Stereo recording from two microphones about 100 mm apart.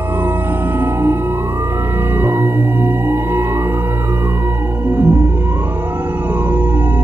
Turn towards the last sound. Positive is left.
turn(degrees=-15)  # may be behind; listen again after turning